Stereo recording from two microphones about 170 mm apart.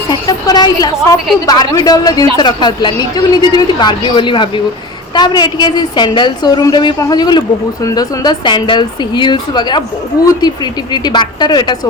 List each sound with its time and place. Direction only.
0.1 s a woman's voice: 25° left (ahead or behind)
10.9 s a woman's voice: 25° left (ahead or behind)